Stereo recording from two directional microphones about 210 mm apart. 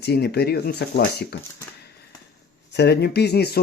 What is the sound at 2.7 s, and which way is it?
Speech, 55° left (ahead or behind).